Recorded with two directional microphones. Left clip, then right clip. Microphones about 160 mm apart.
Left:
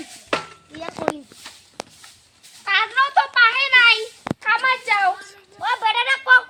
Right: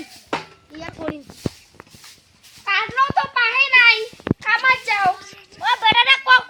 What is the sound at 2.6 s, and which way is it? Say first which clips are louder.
A child's voice: even; 5° left (ahead or behind).